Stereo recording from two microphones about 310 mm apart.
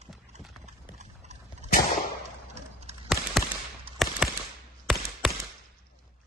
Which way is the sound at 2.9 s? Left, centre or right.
Right.